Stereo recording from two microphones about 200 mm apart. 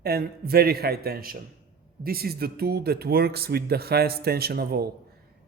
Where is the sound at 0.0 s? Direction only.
50° right (ahead or behind).